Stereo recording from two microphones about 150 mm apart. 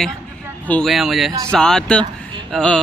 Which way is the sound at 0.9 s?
Centre (ahead or behind).